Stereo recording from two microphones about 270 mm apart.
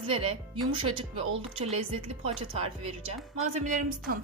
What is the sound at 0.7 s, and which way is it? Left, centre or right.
Speech, centre.